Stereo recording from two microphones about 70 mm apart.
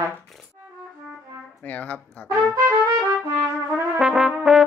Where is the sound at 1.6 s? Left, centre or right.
Left.